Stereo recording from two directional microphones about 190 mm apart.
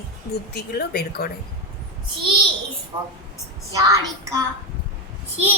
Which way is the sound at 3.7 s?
20° right (ahead or behind).